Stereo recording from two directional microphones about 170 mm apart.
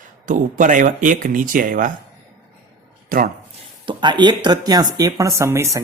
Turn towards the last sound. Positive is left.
turn(degrees=-15)  # may be behind; listen again after turning